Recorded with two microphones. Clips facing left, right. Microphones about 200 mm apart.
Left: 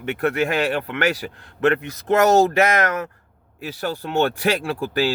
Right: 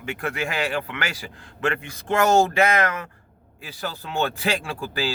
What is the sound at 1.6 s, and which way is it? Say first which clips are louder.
Speech: left 7 dB; 40° left (ahead or behind).